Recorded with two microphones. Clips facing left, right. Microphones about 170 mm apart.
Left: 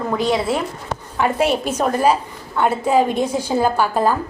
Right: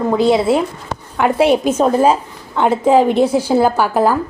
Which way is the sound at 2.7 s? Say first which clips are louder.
Right 5 dB; 90° right.